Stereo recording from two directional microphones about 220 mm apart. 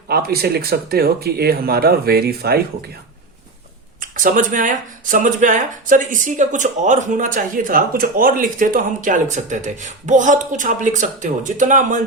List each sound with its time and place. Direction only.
0.1 s speech: 45° right (ahead or behind)
4.0 s speech: 35° right (ahead or behind)